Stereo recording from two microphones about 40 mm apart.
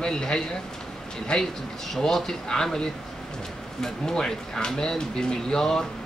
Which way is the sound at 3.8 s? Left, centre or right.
Centre.